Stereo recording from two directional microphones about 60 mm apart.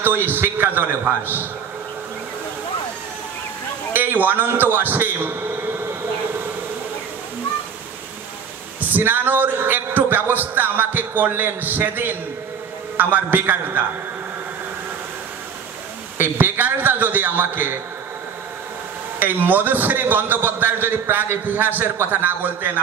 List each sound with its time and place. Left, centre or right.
0.0 s a man's voice: right
3.9 s a man's voice: right
8.9 s a man's voice: right
16.2 s a man's voice: right
19.1 s a man's voice: right